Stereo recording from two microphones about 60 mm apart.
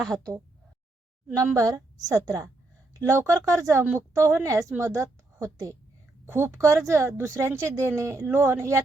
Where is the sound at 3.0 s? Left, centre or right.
Right.